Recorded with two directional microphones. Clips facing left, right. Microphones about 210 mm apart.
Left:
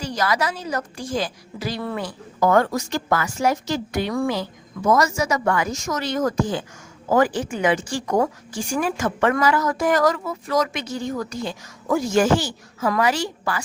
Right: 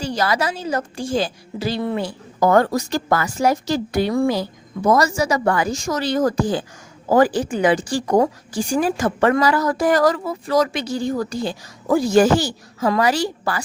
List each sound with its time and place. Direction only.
0.0 s a woman's voice: 30° right (ahead or behind)